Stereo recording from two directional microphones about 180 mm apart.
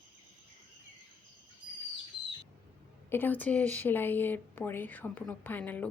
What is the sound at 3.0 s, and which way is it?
A woman's voice, 10° left (ahead or behind).